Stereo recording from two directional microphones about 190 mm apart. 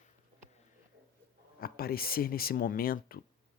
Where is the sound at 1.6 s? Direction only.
50° left (ahead or behind).